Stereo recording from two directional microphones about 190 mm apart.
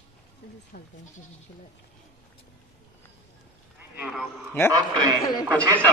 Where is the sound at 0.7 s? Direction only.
50° left (ahead or behind).